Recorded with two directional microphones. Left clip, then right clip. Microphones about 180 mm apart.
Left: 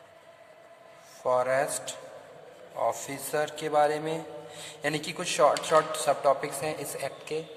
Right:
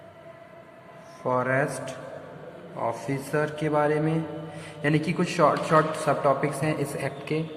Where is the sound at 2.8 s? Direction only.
40° left (ahead or behind).